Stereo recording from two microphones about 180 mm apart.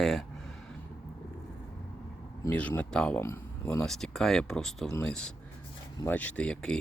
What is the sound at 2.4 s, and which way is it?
Speech, 10° left (ahead or behind).